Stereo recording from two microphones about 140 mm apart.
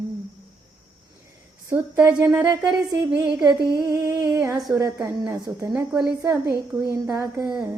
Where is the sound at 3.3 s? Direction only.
25° right (ahead or behind).